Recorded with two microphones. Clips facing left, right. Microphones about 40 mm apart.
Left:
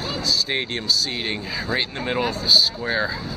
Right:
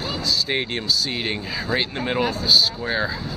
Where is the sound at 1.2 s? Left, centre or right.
Centre.